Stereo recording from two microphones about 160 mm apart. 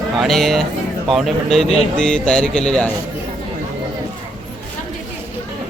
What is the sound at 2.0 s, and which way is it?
Speech, 5° left (ahead or behind).